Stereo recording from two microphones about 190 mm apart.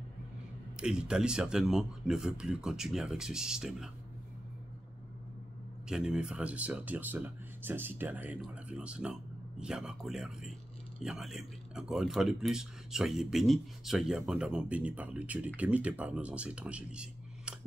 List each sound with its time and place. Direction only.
0.7 s speech: 5° right (ahead or behind)
5.9 s speech: 5° right (ahead or behind)